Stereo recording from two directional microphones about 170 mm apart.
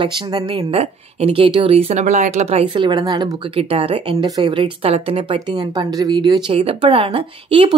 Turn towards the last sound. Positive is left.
turn(degrees=-30)  # may be behind; listen again after turning